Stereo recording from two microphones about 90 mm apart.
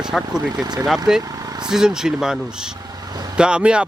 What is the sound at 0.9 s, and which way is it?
Speech, 5° right (ahead or behind).